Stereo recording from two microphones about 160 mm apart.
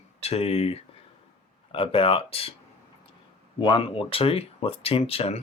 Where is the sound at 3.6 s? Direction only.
30° left (ahead or behind).